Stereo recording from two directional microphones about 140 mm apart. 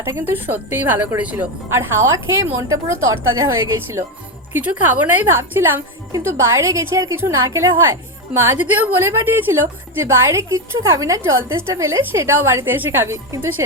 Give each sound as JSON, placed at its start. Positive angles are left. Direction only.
{"t": 0.0, "sound": "a woman's voice", "side_deg": -15}
{"t": 4.5, "sound": "a woman's voice", "side_deg": -15}